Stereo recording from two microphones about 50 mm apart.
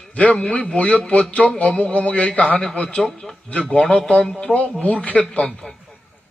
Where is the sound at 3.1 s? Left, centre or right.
Centre.